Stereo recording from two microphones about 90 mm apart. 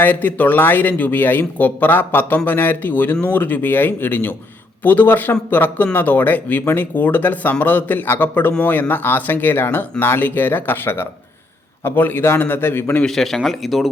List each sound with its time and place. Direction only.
0.0 s speech: 20° left (ahead or behind)
13.1 s speech: 5° left (ahead or behind)